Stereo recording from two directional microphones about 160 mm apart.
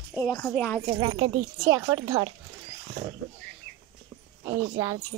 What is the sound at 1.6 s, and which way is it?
Speech, 20° right (ahead or behind).